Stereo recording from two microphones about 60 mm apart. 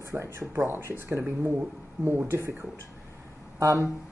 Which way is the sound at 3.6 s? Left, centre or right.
Right.